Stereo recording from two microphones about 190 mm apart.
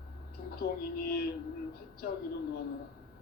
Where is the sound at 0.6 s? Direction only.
55° left (ahead or behind).